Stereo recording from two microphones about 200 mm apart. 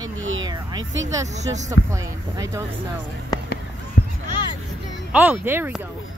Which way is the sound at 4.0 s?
55° left (ahead or behind).